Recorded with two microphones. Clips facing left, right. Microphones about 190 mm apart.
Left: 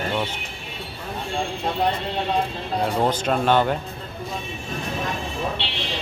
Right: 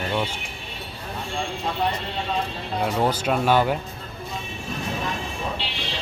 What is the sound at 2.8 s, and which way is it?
Speech, 5° right (ahead or behind).